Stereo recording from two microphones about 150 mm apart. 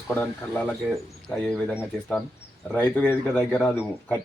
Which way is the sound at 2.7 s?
10° left (ahead or behind).